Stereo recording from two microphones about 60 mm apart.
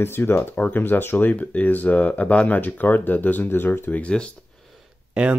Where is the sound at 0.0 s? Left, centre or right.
Left.